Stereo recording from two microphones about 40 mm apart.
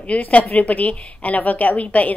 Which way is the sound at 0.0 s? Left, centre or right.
Left.